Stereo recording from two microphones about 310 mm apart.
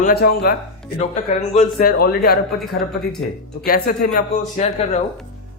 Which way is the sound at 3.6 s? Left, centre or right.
Left.